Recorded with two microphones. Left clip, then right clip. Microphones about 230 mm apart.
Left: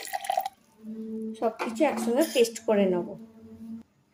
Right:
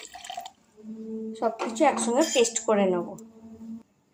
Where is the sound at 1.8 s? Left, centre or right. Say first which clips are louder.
Right 3 dB; centre.